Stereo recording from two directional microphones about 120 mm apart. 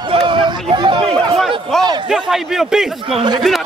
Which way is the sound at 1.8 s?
35° right (ahead or behind).